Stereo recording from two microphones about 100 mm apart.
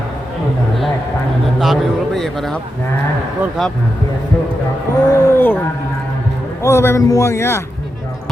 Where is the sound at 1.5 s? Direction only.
Centre (ahead or behind).